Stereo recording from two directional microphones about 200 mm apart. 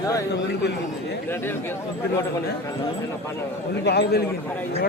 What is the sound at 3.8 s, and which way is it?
Speech, 55° left (ahead or behind).